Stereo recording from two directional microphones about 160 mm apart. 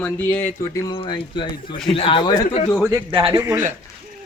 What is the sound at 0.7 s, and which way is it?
Speech, 25° left (ahead or behind).